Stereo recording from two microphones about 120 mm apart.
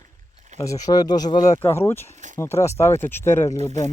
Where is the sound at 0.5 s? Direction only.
25° left (ahead or behind).